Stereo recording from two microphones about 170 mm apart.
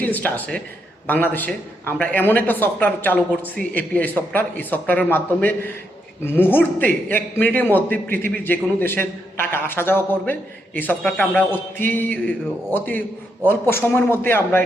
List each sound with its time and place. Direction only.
0.0 s speech: 10° left (ahead or behind)